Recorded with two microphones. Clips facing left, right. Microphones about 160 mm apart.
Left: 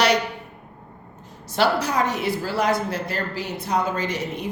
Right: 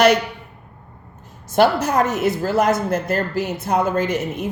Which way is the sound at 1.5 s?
50° right (ahead or behind).